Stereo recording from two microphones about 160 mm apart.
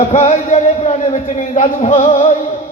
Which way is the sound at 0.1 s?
50° left (ahead or behind).